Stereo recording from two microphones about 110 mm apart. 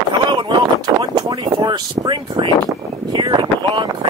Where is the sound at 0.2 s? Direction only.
45° right (ahead or behind).